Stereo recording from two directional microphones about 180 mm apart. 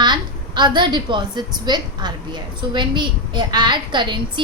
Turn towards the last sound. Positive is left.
turn(degrees=-25)  # may be behind; listen again after turning